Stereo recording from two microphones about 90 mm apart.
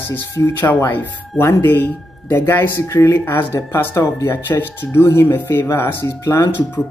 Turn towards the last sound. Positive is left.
turn(degrees=25)  # may be behind; listen again after turning